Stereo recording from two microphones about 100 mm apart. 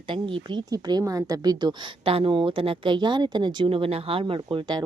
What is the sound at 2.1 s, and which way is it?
Speech, 65° right (ahead or behind).